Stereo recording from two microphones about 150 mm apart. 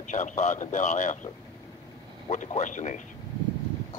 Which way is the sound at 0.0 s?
55° left (ahead or behind).